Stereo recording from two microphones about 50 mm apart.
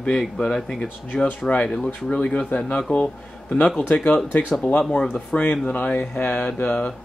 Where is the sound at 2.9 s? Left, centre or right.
Left.